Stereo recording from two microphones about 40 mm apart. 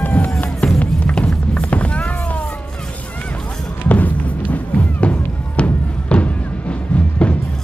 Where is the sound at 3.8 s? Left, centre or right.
Left.